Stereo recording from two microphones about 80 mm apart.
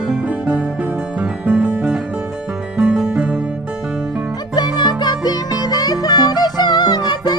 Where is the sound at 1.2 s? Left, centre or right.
Centre.